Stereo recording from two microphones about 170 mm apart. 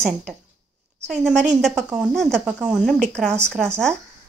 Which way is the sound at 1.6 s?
Centre (ahead or behind).